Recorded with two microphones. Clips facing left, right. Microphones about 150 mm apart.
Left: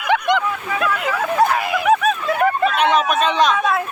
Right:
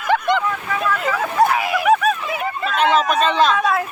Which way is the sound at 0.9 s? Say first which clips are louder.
Even; centre (ahead or behind).